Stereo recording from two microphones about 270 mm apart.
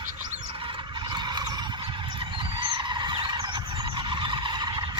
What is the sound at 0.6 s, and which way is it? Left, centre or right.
Turkey, centre.